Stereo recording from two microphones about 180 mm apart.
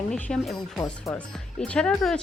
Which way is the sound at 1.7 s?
5° left (ahead or behind).